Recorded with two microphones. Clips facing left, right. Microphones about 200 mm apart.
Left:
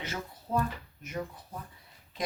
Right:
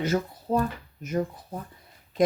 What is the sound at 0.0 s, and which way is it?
Speech, 40° right (ahead or behind).